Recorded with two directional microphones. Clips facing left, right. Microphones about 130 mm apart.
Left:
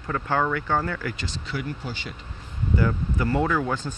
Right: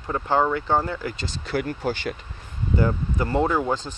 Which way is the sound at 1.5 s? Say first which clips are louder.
Right 8 dB; 50° right (ahead or behind).